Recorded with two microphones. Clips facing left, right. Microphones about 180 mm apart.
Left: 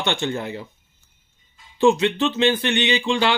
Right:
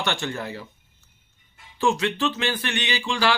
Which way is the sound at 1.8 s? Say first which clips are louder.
Left 6 dB; 20° left (ahead or behind).